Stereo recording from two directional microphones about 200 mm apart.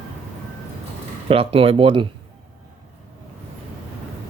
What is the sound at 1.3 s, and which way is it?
Speech, 30° right (ahead or behind).